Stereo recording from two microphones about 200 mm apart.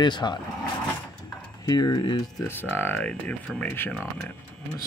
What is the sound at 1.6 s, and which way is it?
Speech, 20° left (ahead or behind).